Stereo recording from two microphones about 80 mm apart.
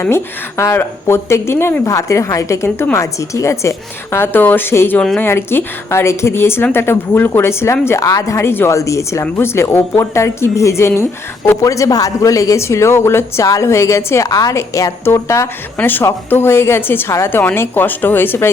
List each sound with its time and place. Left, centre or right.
0.0 s speech: left
2.6 s a woman's voice: left
2.9 s speech: left
11.6 s speech: left
14.3 s a woman's voice: left
15.8 s a woman's voice: left